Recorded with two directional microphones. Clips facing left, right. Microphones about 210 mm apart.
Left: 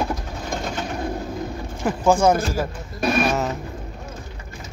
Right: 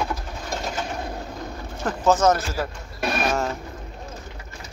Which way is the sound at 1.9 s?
10° left (ahead or behind).